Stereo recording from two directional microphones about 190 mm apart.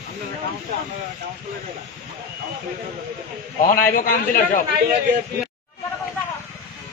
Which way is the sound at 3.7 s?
50° left (ahead or behind).